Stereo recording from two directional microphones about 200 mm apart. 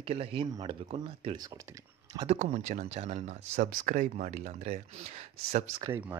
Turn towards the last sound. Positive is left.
turn(degrees=-10)  # may be behind; listen again after turning